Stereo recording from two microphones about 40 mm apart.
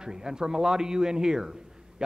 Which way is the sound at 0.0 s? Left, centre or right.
Centre.